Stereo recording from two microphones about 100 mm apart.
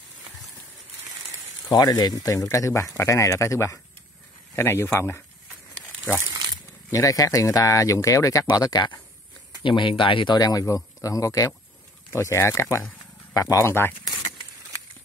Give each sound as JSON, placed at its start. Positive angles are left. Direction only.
{"t": 1.7, "sound": "speech", "side_deg": 45}
{"t": 6.9, "sound": "speech", "side_deg": 35}
{"t": 9.6, "sound": "speech", "side_deg": 55}